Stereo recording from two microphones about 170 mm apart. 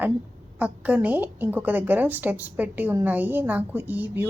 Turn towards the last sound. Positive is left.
turn(degrees=-10)  # may be behind; listen again after turning